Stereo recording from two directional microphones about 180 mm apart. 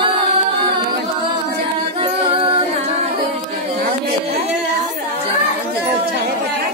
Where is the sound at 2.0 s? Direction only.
30° right (ahead or behind).